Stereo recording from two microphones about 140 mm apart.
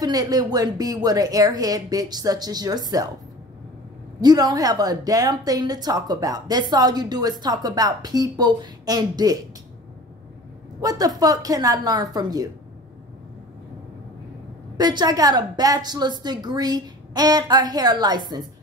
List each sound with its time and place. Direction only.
0.0 s a woman's voice: 25° right (ahead or behind)
4.2 s a woman's voice: 30° right (ahead or behind)
10.8 s a woman's voice: 25° right (ahead or behind)
14.8 s a woman's voice: 30° right (ahead or behind)